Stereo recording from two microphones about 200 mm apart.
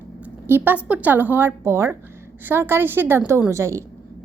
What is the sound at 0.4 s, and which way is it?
A woman's voice, 10° right (ahead or behind).